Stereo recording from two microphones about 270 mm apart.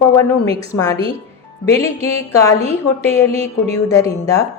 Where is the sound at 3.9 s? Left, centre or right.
Centre.